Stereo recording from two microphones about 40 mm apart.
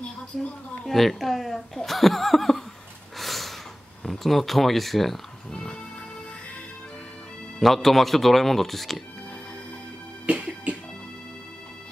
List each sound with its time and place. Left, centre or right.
0.8 s speech: centre
3.2 s gasp: centre
4.0 s speech: centre
5.5 s music: left
7.6 s speech: centre
10.2 s music: right